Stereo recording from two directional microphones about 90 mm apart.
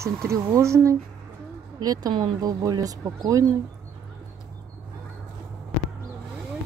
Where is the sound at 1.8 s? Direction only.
45° right (ahead or behind).